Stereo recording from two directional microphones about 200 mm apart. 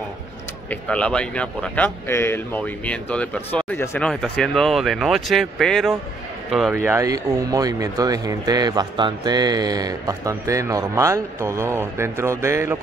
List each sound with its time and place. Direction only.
0.7 s a man's voice: 5° left (ahead or behind); by 12.7 s 15° right (ahead or behind)